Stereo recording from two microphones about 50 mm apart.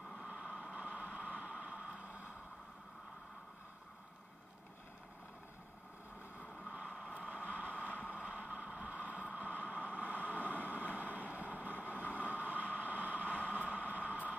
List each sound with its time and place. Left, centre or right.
0.3 s vehicle: centre
7.2 s vehicle: right
9.9 s a sound: right
11.0 s vehicle: right
11.9 s vehicle: left
12.2 s a sound: right
13.5 s vehicle: right